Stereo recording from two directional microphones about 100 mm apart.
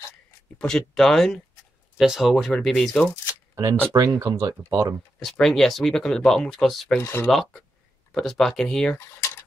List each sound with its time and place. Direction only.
0.6 s speech: 5° left (ahead or behind)
3.9 s speech: 40° right (ahead or behind)
5.2 s speech: 5° left (ahead or behind)
7.0 s speech: 25° left (ahead or behind)
7.2 s speech: centre (ahead or behind)